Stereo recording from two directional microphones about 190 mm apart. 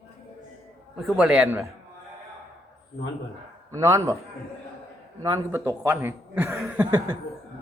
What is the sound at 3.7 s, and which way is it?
Speech, 15° right (ahead or behind).